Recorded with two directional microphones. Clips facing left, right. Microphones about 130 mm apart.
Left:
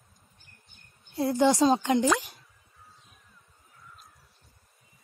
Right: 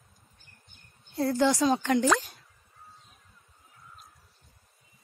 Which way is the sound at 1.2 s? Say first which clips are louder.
Left 2 dB; 20° left (ahead or behind).